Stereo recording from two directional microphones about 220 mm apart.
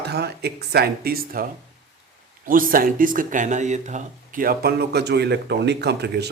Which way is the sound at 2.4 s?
40° right (ahead or behind).